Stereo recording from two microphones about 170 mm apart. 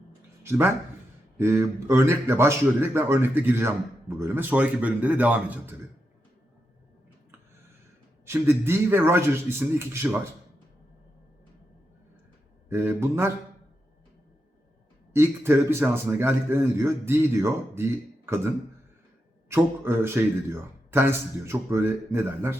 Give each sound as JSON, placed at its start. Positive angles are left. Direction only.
{"t": 0.4, "sound": "a man's voice", "side_deg": -15}
{"t": 8.2, "sound": "a man's voice", "side_deg": -15}
{"t": 12.6, "sound": "a man's voice", "side_deg": -15}
{"t": 15.1, "sound": "a man's voice", "side_deg": -15}